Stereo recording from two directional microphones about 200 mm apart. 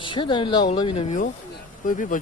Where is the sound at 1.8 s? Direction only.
40° left (ahead or behind).